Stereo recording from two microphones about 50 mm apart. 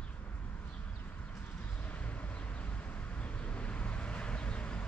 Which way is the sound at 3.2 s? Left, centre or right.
Left.